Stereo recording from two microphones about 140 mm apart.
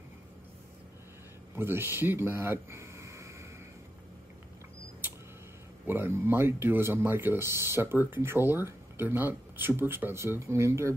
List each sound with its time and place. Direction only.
1.5 s speech: 15° right (ahead or behind)
5.9 s speech: 15° right (ahead or behind)